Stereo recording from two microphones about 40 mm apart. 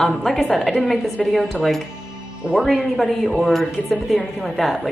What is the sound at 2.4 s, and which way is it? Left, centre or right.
Speech, right.